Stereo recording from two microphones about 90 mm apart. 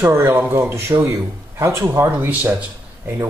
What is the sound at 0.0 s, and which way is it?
Speech, 30° right (ahead or behind).